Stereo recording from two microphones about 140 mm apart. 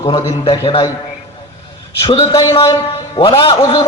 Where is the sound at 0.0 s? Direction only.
35° left (ahead or behind).